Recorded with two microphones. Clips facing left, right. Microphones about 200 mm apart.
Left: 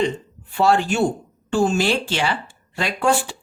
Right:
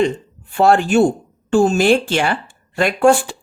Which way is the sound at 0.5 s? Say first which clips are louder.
Right 5 dB; 50° right (ahead or behind).